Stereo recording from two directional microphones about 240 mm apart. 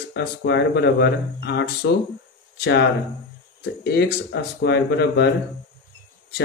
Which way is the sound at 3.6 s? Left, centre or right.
Left.